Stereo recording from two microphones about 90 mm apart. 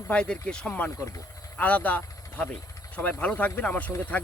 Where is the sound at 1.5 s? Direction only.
15° left (ahead or behind).